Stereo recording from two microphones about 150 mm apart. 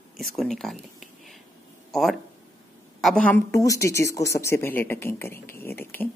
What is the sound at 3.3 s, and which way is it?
Speech, 20° left (ahead or behind).